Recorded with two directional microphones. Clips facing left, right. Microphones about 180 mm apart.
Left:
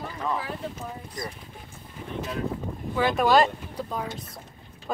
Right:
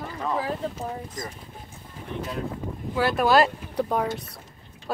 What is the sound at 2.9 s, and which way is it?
Speech, 5° right (ahead or behind).